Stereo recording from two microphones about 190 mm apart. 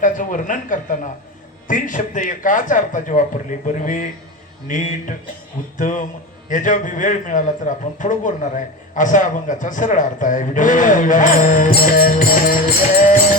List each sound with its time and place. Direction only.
0.0 s a man's voice: 40° left (ahead or behind)